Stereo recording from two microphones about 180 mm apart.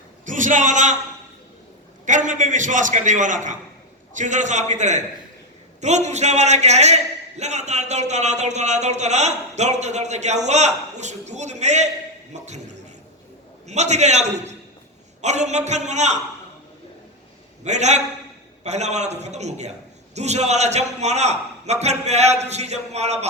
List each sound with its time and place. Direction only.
0.3 s a sound: 45° right (ahead or behind)
2.0 s a man's voice: 45° right (ahead or behind)
13.7 s a man's voice: 40° right (ahead or behind)
17.6 s a man's voice: 40° right (ahead or behind)